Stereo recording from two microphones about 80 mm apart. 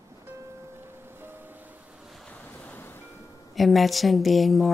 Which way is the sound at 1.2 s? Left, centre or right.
Right.